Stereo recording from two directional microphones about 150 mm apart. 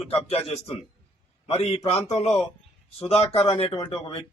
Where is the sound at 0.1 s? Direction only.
40° left (ahead or behind).